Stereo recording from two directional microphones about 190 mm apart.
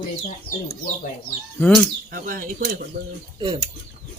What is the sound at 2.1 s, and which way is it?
Speech, 45° right (ahead or behind).